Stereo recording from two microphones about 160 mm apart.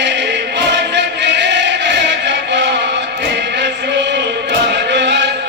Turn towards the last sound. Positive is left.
turn(degrees=-90)